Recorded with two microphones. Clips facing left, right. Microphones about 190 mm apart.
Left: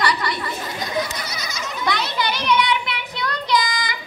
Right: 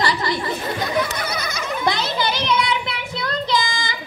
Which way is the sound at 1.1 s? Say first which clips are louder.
Right 5 dB; 60° right (ahead or behind).